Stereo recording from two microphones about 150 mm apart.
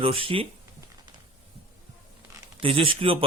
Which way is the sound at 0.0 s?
40° right (ahead or behind).